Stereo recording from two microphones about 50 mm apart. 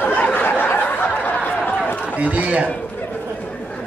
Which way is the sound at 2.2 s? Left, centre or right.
Right.